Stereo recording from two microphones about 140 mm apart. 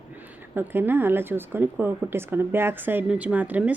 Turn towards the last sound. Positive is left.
turn(degrees=-10)  # may be behind; listen again after turning